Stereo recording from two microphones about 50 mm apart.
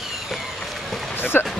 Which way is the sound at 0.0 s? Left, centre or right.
Centre.